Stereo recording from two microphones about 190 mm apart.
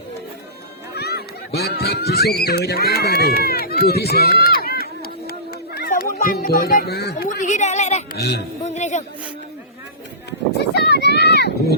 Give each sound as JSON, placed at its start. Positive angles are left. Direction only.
{"t": 0.9, "sound": "goose", "side_deg": 60}
{"t": 8.6, "sound": "speech", "side_deg": 35}
{"t": 10.8, "sound": "a sound", "side_deg": 60}